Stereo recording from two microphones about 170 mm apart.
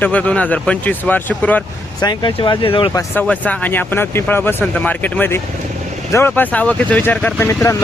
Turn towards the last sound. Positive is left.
turn(degrees=15)  # may be behind; listen again after turning